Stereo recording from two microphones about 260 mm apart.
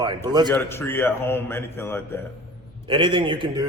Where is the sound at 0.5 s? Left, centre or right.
Centre.